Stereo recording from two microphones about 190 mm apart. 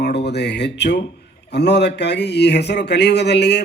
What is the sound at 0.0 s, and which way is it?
A man's voice, 60° left (ahead or behind).